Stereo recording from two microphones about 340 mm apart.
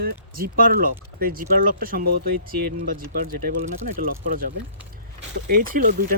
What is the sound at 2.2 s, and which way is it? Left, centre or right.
Speech, right.